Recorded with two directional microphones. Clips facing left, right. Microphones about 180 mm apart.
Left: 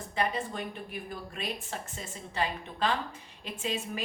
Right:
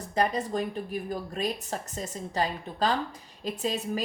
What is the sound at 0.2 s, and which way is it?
Speech, 40° right (ahead or behind).